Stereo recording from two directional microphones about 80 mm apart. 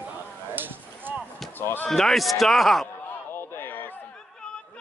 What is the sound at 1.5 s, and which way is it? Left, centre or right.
Speech, left.